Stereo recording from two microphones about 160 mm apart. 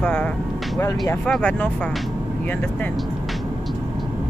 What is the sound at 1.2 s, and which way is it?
Speech, 5° left (ahead or behind).